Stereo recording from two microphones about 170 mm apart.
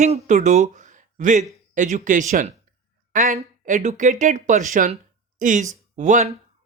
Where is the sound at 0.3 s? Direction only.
45° right (ahead or behind).